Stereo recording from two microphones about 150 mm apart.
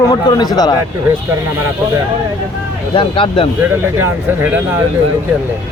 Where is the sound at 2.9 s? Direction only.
35° left (ahead or behind).